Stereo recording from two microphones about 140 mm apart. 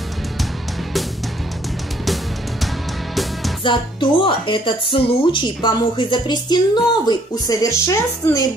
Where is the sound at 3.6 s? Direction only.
35° left (ahead or behind).